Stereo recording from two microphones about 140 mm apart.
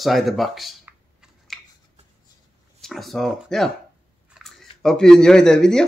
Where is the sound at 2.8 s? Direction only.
Centre (ahead or behind).